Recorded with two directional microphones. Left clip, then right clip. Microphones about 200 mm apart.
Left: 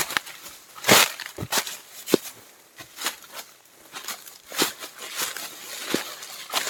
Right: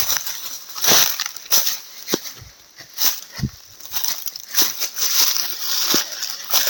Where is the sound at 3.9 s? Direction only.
55° right (ahead or behind).